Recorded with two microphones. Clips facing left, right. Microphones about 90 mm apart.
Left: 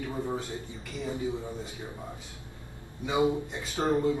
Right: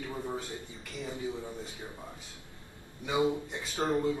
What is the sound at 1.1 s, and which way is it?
Speech, 20° left (ahead or behind).